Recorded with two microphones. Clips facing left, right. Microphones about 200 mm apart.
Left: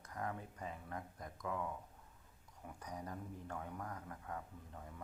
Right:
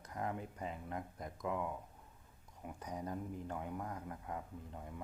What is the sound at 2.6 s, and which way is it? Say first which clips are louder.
A man's voice: right 4 dB; 20° right (ahead or behind).